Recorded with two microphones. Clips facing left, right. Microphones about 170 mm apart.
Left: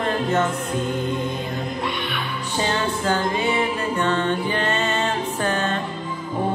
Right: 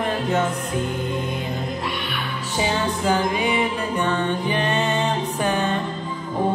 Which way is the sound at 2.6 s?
10° right (ahead or behind).